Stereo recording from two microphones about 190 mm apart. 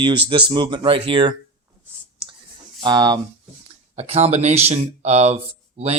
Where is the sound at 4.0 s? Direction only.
35° right (ahead or behind).